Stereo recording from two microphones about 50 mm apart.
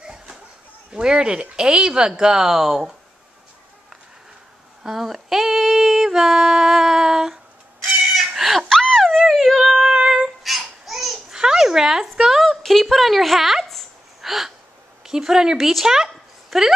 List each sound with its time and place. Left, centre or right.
0.0 s a sound: centre
0.9 s female singing: centre
4.8 s female singing: centre
8.0 s cat: centre
8.4 s giggle: centre
8.6 s a sound: centre
9.3 s dog: centre
9.9 s babbling: centre
11.3 s a sound: centre
13.7 s gasp: centre
15.0 s speech: centre